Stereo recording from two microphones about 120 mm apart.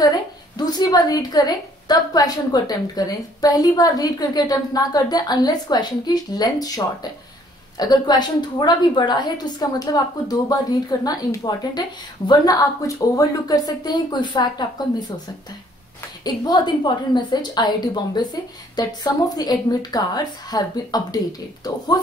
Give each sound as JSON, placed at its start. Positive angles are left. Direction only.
{"t": 0.0, "sound": "a woman's voice", "side_deg": 35}
{"t": 16.3, "sound": "a woman's voice", "side_deg": 35}